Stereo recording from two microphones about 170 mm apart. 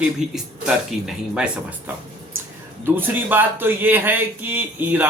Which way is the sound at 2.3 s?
10° right (ahead or behind).